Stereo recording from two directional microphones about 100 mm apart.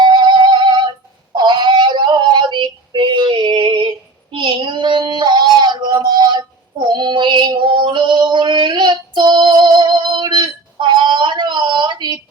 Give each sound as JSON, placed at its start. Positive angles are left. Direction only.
{"t": 0.0, "sound": "music", "side_deg": -50}
{"t": 1.3, "sound": "synthetic singing", "side_deg": -50}